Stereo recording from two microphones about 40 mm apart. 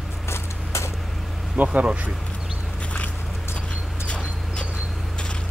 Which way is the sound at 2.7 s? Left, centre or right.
Left.